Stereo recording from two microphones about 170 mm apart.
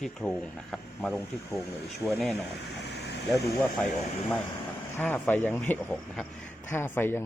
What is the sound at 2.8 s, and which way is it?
Vehicle, 80° left.